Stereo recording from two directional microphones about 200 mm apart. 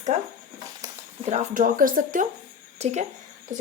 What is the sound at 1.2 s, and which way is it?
Speech, 40° right (ahead or behind).